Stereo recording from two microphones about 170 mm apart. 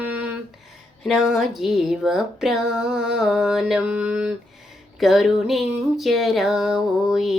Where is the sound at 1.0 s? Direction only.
Centre (ahead or behind).